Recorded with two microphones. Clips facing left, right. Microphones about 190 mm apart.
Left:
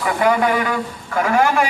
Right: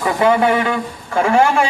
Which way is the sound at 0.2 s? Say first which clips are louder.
Right 3 dB; 25° right (ahead or behind).